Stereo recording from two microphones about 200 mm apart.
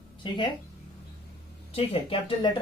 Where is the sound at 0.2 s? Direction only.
25° left (ahead or behind).